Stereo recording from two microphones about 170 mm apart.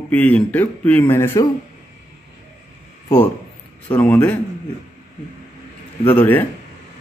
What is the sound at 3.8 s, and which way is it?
Speech, 10° left (ahead or behind).